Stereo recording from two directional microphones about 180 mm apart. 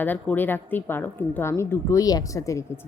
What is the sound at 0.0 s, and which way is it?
A woman's voice, 10° left (ahead or behind).